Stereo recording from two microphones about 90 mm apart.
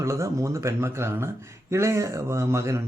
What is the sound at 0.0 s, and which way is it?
Speech, 35° right (ahead or behind).